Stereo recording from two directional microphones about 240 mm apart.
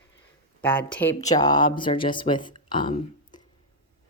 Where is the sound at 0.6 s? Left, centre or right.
Centre.